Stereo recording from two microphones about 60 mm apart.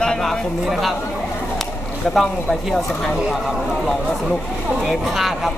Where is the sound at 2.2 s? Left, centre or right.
Centre.